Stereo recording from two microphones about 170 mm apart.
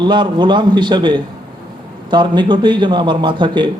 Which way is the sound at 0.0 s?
25° right (ahead or behind).